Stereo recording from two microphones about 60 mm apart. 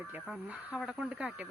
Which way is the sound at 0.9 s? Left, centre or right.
Right.